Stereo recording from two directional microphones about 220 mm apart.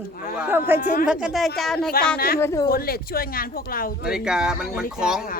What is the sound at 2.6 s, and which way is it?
Speech, 45° left (ahead or behind).